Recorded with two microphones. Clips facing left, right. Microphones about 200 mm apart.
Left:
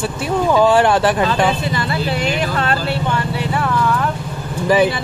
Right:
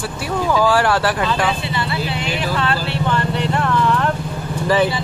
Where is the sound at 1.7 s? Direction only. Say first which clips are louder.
Left 3 dB; 40° left (ahead or behind).